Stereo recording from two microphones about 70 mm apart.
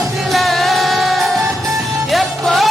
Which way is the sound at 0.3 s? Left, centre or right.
Centre.